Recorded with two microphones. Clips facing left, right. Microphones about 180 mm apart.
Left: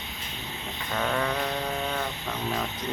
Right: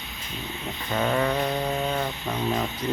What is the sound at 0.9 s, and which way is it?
Speech, 15° right (ahead or behind).